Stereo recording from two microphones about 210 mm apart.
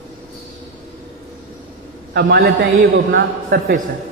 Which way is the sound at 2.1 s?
50° right (ahead or behind).